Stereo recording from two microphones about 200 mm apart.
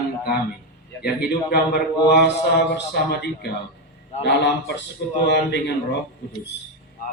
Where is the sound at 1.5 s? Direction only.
50° left (ahead or behind).